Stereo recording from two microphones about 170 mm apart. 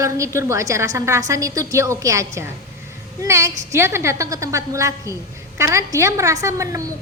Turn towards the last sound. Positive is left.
turn(degrees=-20)  # may be behind; listen again after turning